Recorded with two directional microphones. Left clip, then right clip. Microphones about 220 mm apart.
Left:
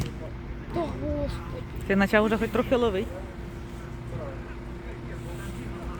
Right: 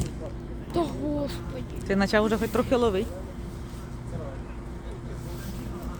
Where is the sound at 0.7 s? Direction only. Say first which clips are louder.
Right 2 dB; 50° right (ahead or behind).